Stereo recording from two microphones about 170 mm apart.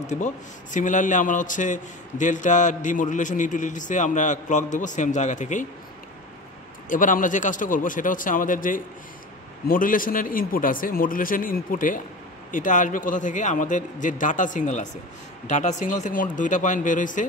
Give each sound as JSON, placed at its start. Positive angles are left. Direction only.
{"t": 0.0, "sound": "a man's voice", "side_deg": 45}
{"t": 6.9, "sound": "a man's voice", "side_deg": 50}